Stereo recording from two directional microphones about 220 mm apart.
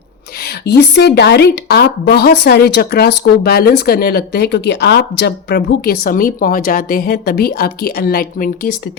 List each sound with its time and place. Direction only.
0.4 s a woman's voice: 50° left (ahead or behind)